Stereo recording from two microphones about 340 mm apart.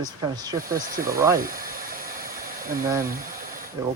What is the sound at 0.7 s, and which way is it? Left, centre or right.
Speech, right.